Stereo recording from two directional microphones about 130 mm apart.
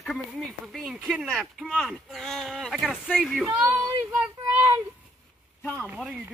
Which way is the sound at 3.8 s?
15° right (ahead or behind).